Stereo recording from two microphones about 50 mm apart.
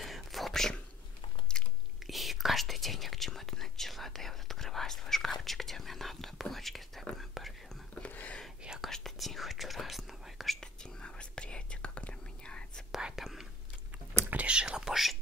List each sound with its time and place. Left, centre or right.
0.0 s whispering: centre
1.5 s biting: centre
2.0 s whispering: centre
8.8 s whispering: centre
10.6 s whispering: centre
12.9 s whispering: centre
13.9 s a sound: right
14.4 s whispering: centre